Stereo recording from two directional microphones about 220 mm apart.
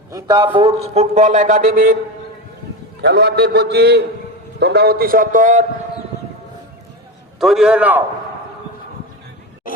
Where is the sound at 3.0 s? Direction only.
50° right (ahead or behind).